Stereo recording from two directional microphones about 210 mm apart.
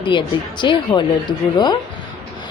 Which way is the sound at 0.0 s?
25° left (ahead or behind).